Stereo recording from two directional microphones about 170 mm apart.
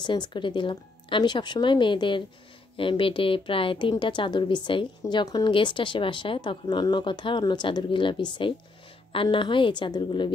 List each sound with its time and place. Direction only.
0.0 s a woman's voice: 25° left (ahead or behind)